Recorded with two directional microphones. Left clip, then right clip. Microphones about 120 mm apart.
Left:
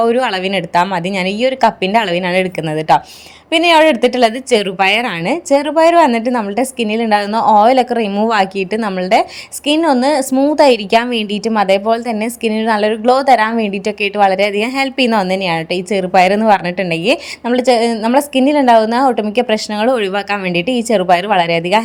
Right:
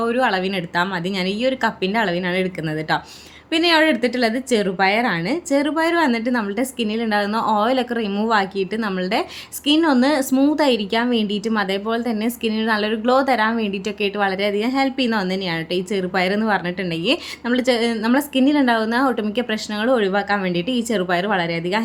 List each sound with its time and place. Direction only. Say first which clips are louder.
0.0 s a woman's voice: left 6 dB; 50° left (ahead or behind)
3.5 s a woman's voice: left 7 dB; 45° left (ahead or behind)
8.3 s a woman's voice: left 5 dB; 55° left (ahead or behind); by 10.5 s 30° left (ahead or behind)
10.5 s a woman's voice: left 9 dB; 50° left (ahead or behind)